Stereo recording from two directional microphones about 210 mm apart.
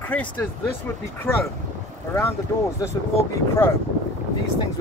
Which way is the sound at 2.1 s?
10° left (ahead or behind).